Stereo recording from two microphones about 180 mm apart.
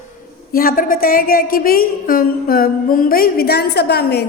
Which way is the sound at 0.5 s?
50° left (ahead or behind).